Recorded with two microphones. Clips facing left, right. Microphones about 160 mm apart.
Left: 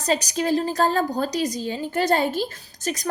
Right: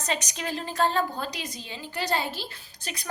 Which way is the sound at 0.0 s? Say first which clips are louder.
Left 8 dB; 35° left (ahead or behind).